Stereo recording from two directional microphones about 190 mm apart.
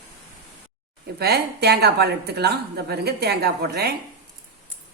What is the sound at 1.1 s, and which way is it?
Speech, 55° right (ahead or behind).